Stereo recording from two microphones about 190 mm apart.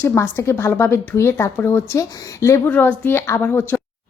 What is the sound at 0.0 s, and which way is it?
A woman's voice, 15° left (ahead or behind).